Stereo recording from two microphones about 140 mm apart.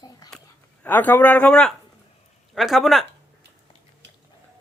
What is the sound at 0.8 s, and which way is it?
Speech, 10° left (ahead or behind).